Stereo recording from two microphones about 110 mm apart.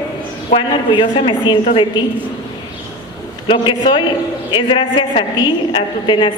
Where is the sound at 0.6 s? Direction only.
50° left (ahead or behind).